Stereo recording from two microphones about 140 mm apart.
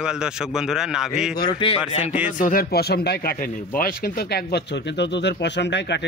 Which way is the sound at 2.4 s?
90° left.